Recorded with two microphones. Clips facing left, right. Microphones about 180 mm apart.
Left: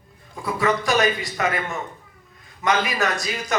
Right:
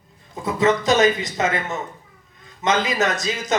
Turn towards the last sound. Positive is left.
turn(degrees=-20)  # may be behind; listen again after turning